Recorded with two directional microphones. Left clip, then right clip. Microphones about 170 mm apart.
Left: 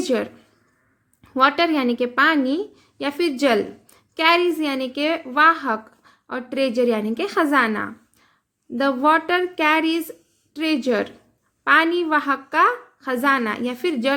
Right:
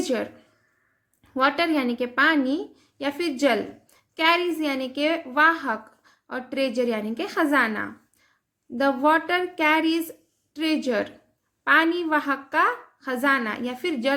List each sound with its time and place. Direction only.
0.0 s a woman's voice: 20° left (ahead or behind)